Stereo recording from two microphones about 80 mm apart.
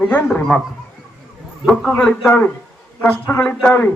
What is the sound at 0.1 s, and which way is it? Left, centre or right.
Speech, centre.